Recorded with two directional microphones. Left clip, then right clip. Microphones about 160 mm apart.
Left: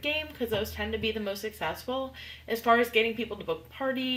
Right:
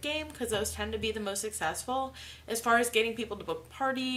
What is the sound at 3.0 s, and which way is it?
Speech, 10° right (ahead or behind).